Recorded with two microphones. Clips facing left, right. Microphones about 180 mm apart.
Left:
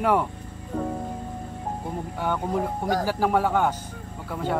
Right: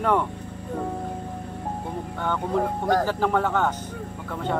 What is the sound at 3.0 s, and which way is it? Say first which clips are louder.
Speech: even; 10° left (ahead or behind).